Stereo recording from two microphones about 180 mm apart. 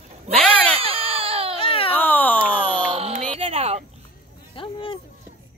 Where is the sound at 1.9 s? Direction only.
10° left (ahead or behind).